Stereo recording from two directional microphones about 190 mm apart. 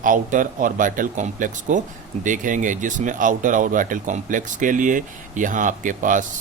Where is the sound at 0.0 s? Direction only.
45° right (ahead or behind).